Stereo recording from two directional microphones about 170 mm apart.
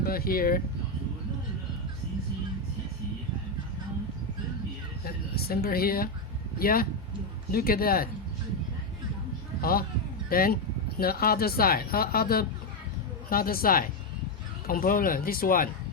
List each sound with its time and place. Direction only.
0.0 s speech: 60° left (ahead or behind)
5.0 s speech: 65° left (ahead or behind)
9.6 s a sound: 60° left (ahead or behind)
10.2 s speech: 60° left (ahead or behind)